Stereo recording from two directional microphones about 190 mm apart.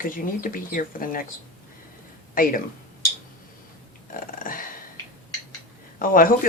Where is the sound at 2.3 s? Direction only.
45° left (ahead or behind).